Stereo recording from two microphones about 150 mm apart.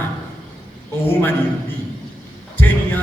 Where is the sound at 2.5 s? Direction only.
15° left (ahead or behind).